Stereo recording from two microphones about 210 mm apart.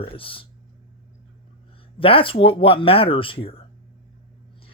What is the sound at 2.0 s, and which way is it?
Speech, 25° left (ahead or behind).